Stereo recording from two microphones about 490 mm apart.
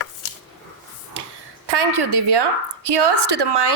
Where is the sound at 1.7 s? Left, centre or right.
Right.